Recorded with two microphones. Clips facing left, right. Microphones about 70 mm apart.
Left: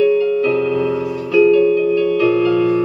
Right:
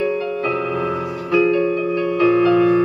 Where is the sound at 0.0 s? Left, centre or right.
Right.